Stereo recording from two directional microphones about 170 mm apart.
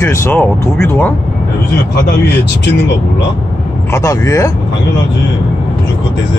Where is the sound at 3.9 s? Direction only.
20° left (ahead or behind).